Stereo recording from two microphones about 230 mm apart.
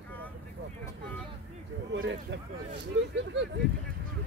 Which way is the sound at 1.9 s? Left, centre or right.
Right.